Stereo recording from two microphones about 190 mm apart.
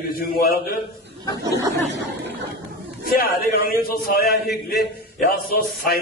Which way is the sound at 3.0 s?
50° left (ahead or behind).